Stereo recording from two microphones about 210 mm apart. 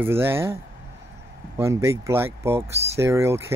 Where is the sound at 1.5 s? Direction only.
10° right (ahead or behind).